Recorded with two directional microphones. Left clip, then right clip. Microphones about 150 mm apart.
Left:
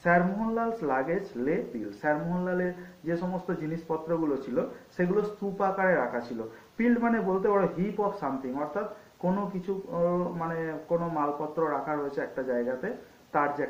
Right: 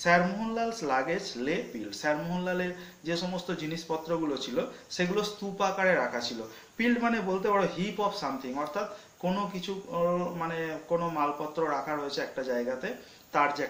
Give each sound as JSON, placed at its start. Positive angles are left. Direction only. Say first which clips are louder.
{"t": 0.0, "sound": "speech", "louder": "even", "side_deg": -25}
{"t": 4.1, "sound": "speech", "louder": "left 3 dB", "side_deg": -20}